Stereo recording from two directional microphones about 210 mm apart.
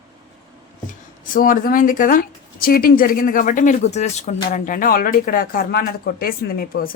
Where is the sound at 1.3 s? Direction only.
40° left (ahead or behind).